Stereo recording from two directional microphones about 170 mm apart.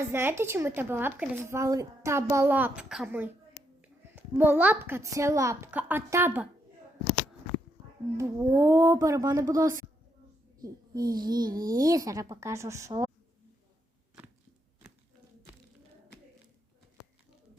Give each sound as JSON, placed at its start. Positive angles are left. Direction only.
{"t": 0.1, "sound": "a woman's voice", "side_deg": -15}
{"t": 8.1, "sound": "a woman's voice", "side_deg": -15}